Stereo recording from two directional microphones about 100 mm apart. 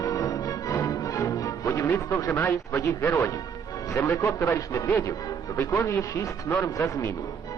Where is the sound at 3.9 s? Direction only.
30° left (ahead or behind).